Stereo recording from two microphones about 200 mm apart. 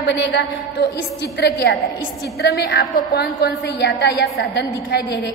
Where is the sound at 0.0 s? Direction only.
60° left (ahead or behind).